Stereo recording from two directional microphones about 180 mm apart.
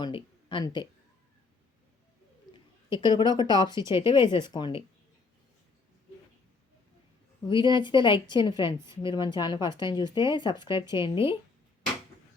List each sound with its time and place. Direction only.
0.0 s speech: 30° left (ahead or behind)
2.5 s speech: 25° left (ahead or behind)
7.4 s speech: 25° left (ahead or behind)